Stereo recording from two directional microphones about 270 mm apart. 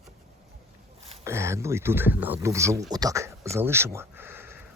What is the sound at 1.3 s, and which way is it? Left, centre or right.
Speech, centre.